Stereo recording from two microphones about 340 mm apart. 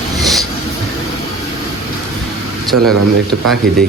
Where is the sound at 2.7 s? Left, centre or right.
Right.